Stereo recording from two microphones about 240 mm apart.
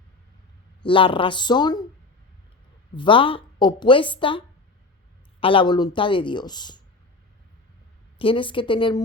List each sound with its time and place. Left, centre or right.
0.8 s a woman's voice: left
2.9 s a woman's voice: left
8.2 s a woman's voice: left